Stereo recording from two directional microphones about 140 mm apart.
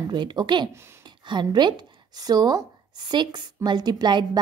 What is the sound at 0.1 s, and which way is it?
Speech, 30° right (ahead or behind).